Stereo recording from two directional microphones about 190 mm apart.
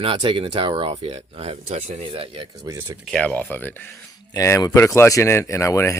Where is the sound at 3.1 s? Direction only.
5° left (ahead or behind).